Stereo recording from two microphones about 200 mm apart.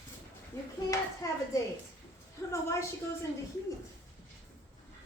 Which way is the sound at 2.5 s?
15° left (ahead or behind).